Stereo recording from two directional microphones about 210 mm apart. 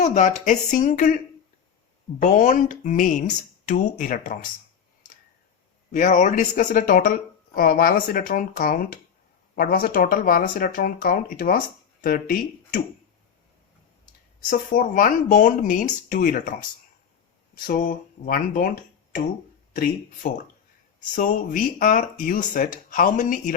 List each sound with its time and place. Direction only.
0.0 s speech: 35° left (ahead or behind)
2.1 s speech: 35° left (ahead or behind)
5.9 s speech: 40° left (ahead or behind)
14.7 s speech: 40° left (ahead or behind)